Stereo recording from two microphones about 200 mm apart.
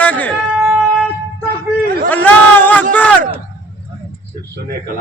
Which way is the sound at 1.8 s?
50° right (ahead or behind).